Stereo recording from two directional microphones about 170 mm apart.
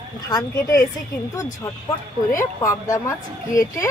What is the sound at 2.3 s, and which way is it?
Speech, 15° left (ahead or behind).